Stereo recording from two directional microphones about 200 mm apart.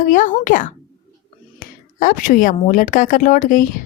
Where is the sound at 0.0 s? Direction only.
40° left (ahead or behind).